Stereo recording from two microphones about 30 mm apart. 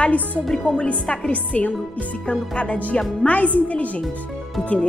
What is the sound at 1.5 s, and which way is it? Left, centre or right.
Speech, left.